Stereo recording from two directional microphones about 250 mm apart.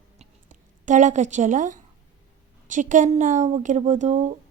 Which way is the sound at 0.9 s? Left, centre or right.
Right.